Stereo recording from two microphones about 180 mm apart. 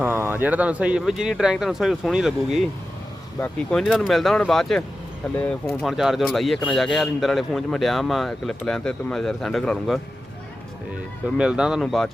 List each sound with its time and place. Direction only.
0.0 s speech: 10° right (ahead or behind)
11.3 s speech: 5° right (ahead or behind)